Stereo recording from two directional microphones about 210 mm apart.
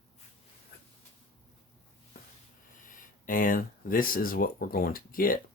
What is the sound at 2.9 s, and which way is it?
Speech, 40° left (ahead or behind).